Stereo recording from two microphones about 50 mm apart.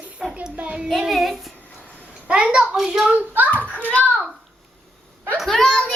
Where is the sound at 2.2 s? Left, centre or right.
Centre.